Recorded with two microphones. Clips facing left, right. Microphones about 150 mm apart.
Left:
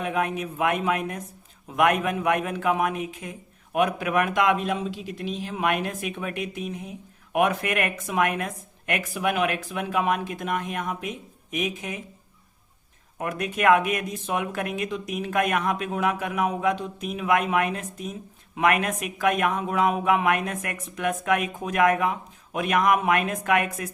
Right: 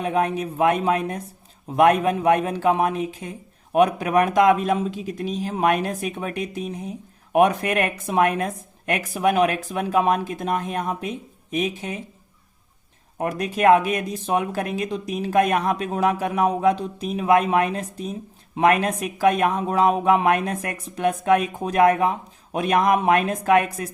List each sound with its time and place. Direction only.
0.0 s speech: 35° right (ahead or behind)
13.1 s speech: 35° right (ahead or behind)